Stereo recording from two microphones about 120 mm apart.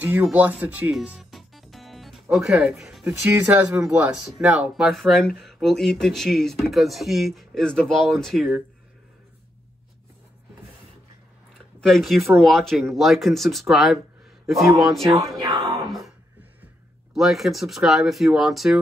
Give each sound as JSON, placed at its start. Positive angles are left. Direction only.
{"t": 0.0, "sound": "speech", "side_deg": -10}
{"t": 0.9, "sound": "music", "side_deg": 0}
{"t": 2.2, "sound": "speech", "side_deg": -5}
{"t": 3.3, "sound": "speech", "side_deg": -15}
{"t": 11.8, "sound": "speech", "side_deg": 0}
{"t": 15.4, "sound": "speech", "side_deg": -35}
{"t": 17.1, "sound": "speech", "side_deg": 0}